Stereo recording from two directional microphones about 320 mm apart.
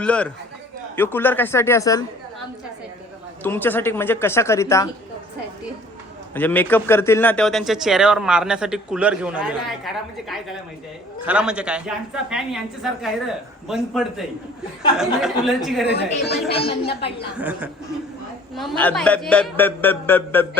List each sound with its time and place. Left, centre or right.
0.0 s a man's voice: centre
3.4 s speech: centre
6.3 s speech: centre
15.9 s speech: left
16.5 s speech: centre
17.3 s speech: centre